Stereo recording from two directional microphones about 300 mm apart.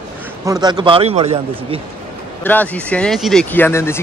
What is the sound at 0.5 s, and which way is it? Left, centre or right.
A man's voice, centre.